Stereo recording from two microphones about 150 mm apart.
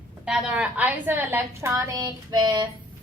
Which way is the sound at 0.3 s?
5° right (ahead or behind).